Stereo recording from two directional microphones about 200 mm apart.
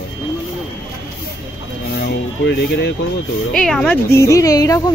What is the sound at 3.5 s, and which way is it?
Speech, centre (ahead or behind).